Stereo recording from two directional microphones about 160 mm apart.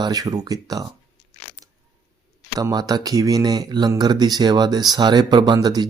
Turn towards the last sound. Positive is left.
turn(degrees=-25)  # may be behind; listen again after turning